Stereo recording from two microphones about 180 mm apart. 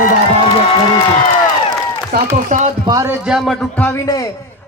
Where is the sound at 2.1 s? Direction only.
60° right (ahead or behind).